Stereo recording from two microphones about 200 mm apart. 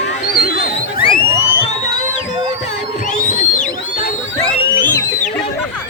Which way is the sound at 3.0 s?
35° left (ahead or behind).